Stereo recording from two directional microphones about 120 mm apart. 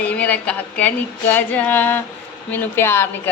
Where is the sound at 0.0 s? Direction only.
10° left (ahead or behind).